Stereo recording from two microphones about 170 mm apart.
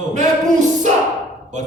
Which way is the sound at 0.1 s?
45° right (ahead or behind).